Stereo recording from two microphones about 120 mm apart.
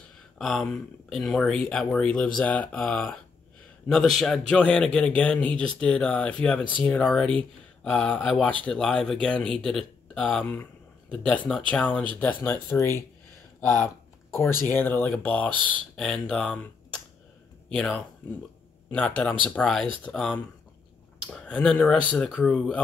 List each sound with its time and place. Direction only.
0.4 s speech: 5° left (ahead or behind)